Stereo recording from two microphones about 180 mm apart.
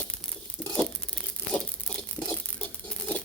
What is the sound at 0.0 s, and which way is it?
Crumpling, 5° left (ahead or behind).